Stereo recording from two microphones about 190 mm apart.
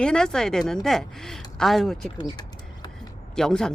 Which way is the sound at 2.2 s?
20° left (ahead or behind).